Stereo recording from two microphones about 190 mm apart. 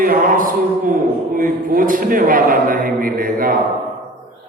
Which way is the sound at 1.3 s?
45° right (ahead or behind).